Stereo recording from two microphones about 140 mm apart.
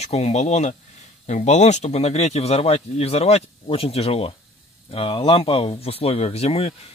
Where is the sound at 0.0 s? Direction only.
50° left (ahead or behind).